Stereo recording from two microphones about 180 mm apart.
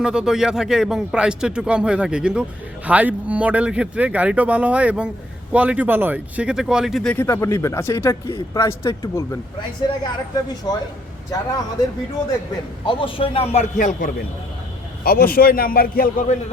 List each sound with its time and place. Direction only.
0.0 s a man's voice: 5° right (ahead or behind); by 10.8 s 25° left (ahead or behind)
12.8 s a man's voice: 30° left (ahead or behind); by 16.4 s 50° left (ahead or behind)